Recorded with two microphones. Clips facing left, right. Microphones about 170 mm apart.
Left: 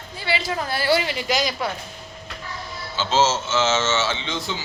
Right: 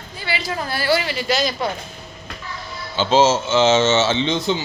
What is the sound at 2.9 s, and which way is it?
Speech, 15° right (ahead or behind).